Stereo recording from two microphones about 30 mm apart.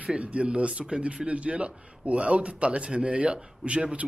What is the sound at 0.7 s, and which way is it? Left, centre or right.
Speech, right.